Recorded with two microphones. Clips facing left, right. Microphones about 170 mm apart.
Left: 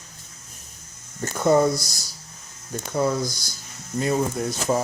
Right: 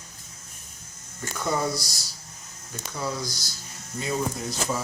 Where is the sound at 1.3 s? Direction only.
50° left (ahead or behind).